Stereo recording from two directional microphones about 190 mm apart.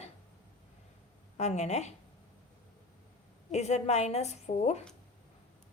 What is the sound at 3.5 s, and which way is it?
A woman's voice, 35° left (ahead or behind).